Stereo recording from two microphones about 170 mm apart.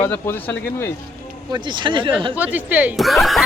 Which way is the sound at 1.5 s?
25° right (ahead or behind).